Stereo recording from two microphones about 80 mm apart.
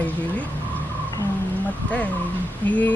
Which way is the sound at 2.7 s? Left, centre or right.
Centre.